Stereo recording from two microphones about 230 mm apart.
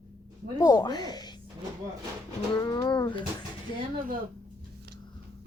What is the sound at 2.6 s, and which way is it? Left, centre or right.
Speech, centre.